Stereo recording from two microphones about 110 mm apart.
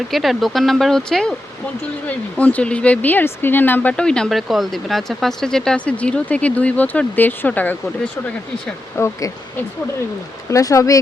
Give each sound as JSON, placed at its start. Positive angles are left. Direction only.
{"t": 0.1, "sound": "speech", "side_deg": 0}
{"t": 9.0, "sound": "speech", "side_deg": 25}